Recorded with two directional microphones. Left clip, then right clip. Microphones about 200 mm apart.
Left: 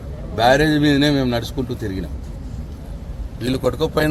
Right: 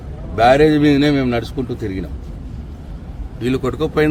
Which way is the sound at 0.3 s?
10° right (ahead or behind).